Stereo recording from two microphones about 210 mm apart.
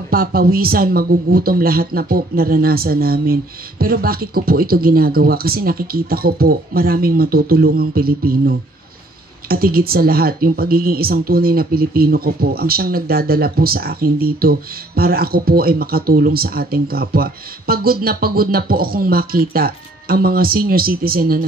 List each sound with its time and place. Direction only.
0.1 s speech: 45° right (ahead or behind)